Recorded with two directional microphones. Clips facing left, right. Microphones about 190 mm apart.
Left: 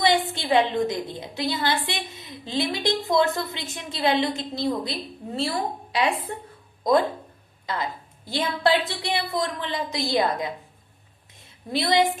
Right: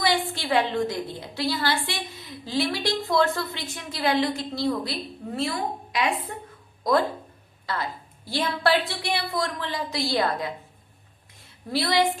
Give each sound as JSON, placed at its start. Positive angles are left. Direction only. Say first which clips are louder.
{"t": 0.0, "sound": "a woman's voice", "louder": "left 3 dB", "side_deg": 20}
{"t": 7.7, "sound": "a woman's voice", "louder": "left 1 dB", "side_deg": 20}
{"t": 11.3, "sound": "a sound", "louder": "even", "side_deg": 20}